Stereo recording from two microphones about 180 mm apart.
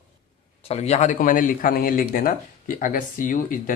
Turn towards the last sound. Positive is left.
turn(degrees=50)  # may be behind; listen again after turning